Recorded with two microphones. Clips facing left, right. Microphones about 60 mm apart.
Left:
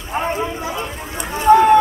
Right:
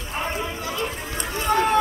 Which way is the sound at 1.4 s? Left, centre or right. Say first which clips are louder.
Left 11 dB; centre.